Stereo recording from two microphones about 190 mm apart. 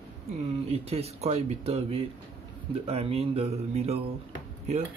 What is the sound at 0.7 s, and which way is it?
Speech, 35° right (ahead or behind).